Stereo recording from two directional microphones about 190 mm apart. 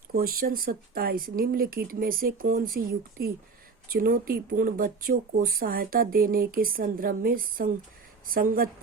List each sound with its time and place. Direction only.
0.1 s speech: 50° right (ahead or behind)